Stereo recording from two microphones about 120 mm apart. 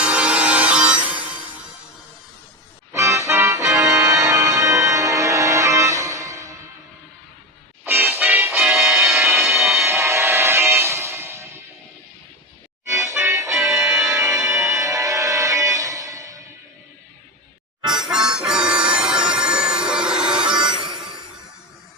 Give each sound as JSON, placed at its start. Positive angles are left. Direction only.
{"t": 0.0, "sound": "music", "side_deg": -10}
{"t": 2.9, "sound": "music", "side_deg": -25}
{"t": 7.9, "sound": "music", "side_deg": -20}
{"t": 12.9, "sound": "music", "side_deg": -25}
{"t": 13.6, "sound": "music", "side_deg": -5}
{"t": 13.9, "sound": "music", "side_deg": -25}
{"t": 17.9, "sound": "music", "side_deg": -5}
{"t": 20.6, "sound": "a sound", "side_deg": -40}